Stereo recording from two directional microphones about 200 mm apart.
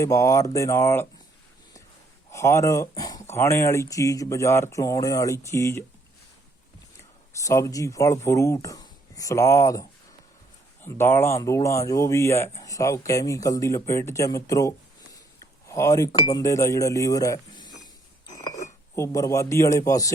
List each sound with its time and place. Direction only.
0.0 s speech: 15° left (ahead or behind)
2.3 s speech: 15° left (ahead or behind)
7.3 s speech: 15° left (ahead or behind)
10.8 s speech: 10° left (ahead or behind)
18.3 s a sound: 15° left (ahead or behind)
18.9 s speech: 15° left (ahead or behind)